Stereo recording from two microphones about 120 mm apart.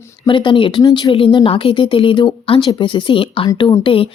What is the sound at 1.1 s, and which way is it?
Speech, 45° left (ahead or behind).